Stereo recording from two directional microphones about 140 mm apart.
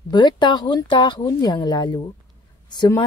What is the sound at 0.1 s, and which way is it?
Speech, 30° left (ahead or behind).